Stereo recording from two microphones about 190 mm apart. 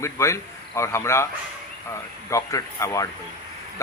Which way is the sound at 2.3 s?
15° left (ahead or behind).